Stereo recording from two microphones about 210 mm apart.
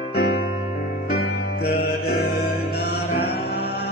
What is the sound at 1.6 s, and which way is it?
Mantra, 50° left (ahead or behind).